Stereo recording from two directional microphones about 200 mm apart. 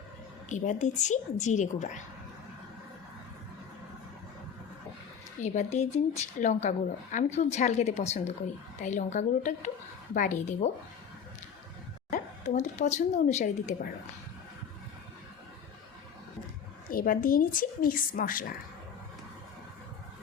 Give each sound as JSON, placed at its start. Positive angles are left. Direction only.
{"t": 0.4, "sound": "speech", "side_deg": 40}
{"t": 5.4, "sound": "speech", "side_deg": 35}
{"t": 12.1, "sound": "speech", "side_deg": 35}
{"t": 16.9, "sound": "a woman's voice", "side_deg": 45}